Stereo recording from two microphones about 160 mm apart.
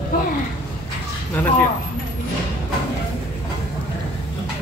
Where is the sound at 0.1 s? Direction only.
70° left (ahead or behind).